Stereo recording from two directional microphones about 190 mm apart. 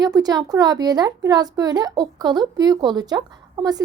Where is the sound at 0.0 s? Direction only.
20° right (ahead or behind).